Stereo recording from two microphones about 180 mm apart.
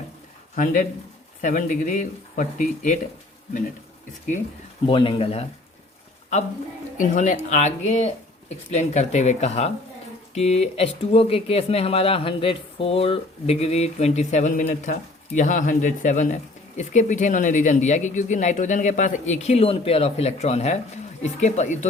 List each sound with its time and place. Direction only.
0.5 s speech: 50° left (ahead or behind)
4.9 s speech: 25° left (ahead or behind)
6.9 s speech: 45° left (ahead or behind)